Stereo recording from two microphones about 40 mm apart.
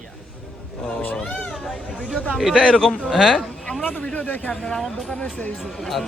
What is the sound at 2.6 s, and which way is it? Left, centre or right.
Speech, centre.